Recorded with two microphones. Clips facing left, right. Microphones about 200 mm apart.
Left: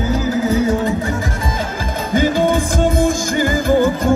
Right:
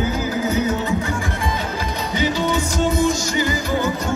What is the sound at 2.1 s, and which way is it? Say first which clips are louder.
Music: left 6 dB; 50° left (ahead or behind).